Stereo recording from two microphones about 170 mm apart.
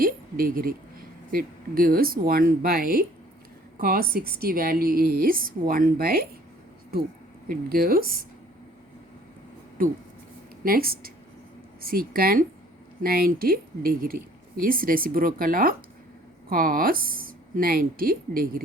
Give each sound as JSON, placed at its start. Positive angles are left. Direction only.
{"t": 0.0, "sound": "a woman's voice", "side_deg": -55}
{"t": 7.4, "sound": "speech", "side_deg": -60}
{"t": 9.8, "sound": "speech", "side_deg": -60}